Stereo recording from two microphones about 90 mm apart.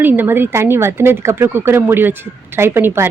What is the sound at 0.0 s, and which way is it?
Speech, 20° right (ahead or behind).